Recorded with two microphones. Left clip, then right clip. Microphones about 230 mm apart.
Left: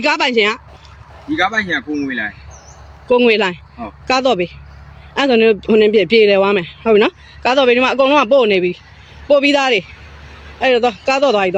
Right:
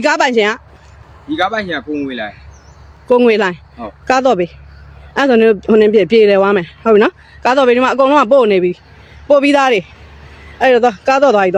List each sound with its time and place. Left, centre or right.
0.0 s speech: centre
1.4 s a man's voice: centre
3.1 s speech: centre